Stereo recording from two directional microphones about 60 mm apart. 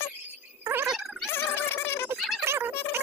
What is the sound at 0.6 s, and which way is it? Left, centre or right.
Gargling, right.